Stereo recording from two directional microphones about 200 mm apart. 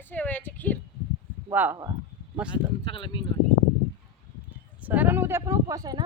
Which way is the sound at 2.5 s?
25° left (ahead or behind).